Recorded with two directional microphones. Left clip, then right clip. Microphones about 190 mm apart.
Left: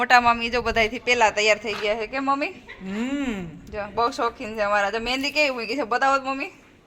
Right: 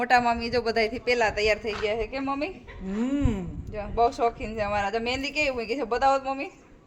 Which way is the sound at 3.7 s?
25° left (ahead or behind).